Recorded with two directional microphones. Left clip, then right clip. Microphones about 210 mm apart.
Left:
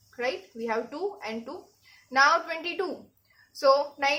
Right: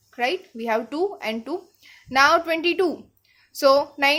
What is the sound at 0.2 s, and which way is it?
A woman's voice, 50° right (ahead or behind).